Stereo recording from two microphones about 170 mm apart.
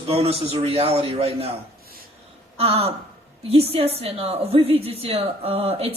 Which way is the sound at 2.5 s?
35° right (ahead or behind).